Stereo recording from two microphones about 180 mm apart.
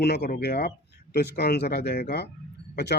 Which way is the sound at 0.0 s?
65° left (ahead or behind).